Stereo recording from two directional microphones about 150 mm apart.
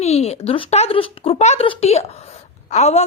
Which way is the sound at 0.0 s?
45° left (ahead or behind).